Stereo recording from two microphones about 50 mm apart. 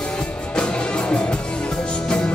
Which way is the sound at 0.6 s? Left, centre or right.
Centre.